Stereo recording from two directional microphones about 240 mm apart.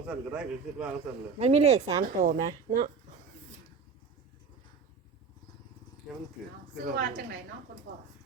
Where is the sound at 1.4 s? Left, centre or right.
Right.